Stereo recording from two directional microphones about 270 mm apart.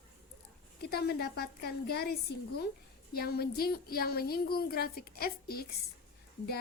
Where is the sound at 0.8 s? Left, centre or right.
Left.